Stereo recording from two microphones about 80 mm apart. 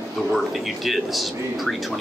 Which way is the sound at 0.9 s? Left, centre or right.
Centre.